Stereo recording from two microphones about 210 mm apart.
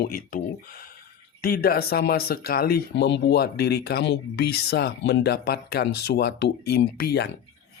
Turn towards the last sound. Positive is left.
turn(degrees=50)  # may be behind; listen again after turning